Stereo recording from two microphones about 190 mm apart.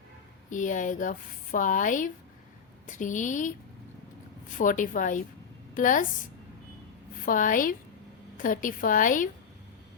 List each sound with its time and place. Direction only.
0.5 s a woman's voice: 40° left (ahead or behind)
4.5 s speech: 45° left (ahead or behind)
7.3 s speech: 45° left (ahead or behind)